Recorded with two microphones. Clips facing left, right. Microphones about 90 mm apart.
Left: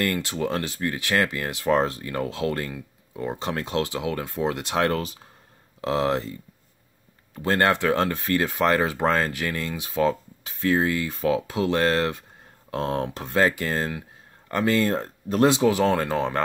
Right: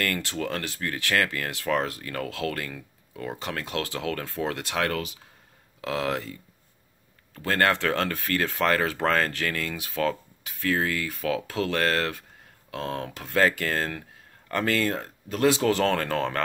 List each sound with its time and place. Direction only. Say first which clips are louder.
0.0 s speech: left 3 dB; 20° left (ahead or behind)
7.3 s speech: left 2 dB; 20° left (ahead or behind)
15.6 s speech: left 3 dB; 10° left (ahead or behind)